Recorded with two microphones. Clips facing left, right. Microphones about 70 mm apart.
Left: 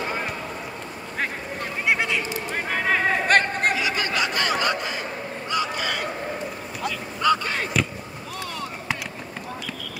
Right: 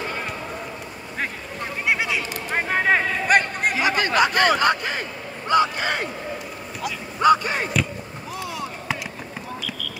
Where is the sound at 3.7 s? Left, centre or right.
Right.